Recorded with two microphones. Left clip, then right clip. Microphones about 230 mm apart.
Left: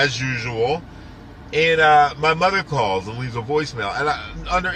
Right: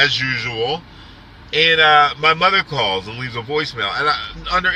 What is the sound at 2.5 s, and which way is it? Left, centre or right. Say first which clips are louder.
A man's voice: right 3 dB; centre.